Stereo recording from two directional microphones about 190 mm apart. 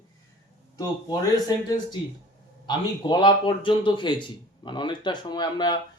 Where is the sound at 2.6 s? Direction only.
25° left (ahead or behind).